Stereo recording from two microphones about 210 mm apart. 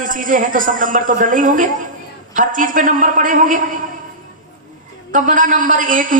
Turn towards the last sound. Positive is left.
turn(degrees=-40)  # may be behind; listen again after turning